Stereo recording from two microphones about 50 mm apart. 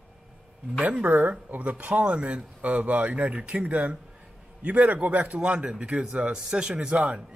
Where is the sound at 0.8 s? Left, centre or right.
Right.